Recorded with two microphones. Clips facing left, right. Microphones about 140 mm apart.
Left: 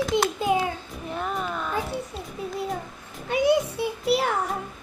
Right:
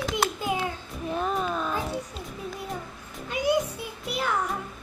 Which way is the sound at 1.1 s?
20° right (ahead or behind).